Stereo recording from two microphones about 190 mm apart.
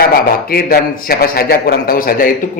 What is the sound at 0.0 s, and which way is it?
A man's voice, 50° left (ahead or behind).